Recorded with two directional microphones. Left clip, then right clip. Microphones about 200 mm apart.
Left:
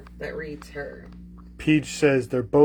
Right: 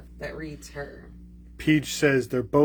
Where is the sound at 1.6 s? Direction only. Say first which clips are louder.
Left 1 dB; 10° right (ahead or behind).